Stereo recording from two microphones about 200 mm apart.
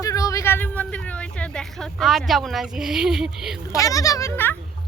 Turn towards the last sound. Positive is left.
turn(degrees=10)  # may be behind; listen again after turning